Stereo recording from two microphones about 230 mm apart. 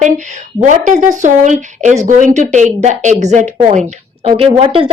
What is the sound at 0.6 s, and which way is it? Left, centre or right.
A woman's voice, right.